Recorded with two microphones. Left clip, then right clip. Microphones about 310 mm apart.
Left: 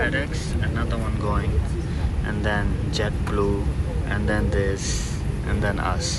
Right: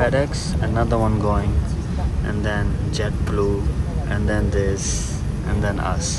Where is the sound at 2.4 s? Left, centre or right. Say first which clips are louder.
Even; centre.